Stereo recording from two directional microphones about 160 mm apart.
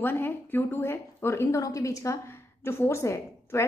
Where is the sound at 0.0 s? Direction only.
15° left (ahead or behind).